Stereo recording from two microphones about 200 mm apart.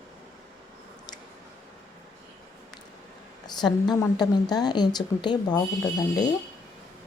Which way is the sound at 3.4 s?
20° left (ahead or behind).